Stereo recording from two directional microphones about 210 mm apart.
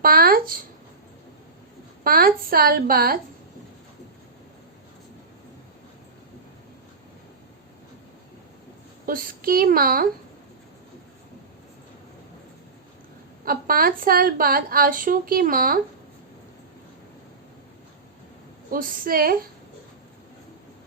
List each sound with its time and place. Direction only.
0.0 s speech: 45° right (ahead or behind)
2.0 s a woman's voice: 45° right (ahead or behind)
9.0 s a woman's voice: 45° right (ahead or behind)
13.4 s a woman's voice: 45° right (ahead or behind)
18.7 s a woman's voice: 45° right (ahead or behind)